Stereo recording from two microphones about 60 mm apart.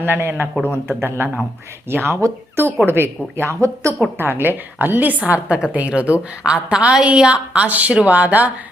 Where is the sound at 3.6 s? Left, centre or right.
Right.